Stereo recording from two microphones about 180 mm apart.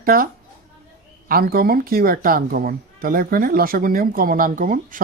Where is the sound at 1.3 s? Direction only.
55° right (ahead or behind).